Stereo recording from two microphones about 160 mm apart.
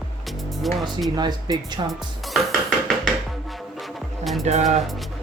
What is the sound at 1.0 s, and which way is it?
Speech, 25° right (ahead or behind).